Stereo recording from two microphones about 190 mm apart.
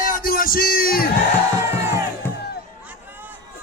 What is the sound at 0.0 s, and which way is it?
Music, 50° left (ahead or behind).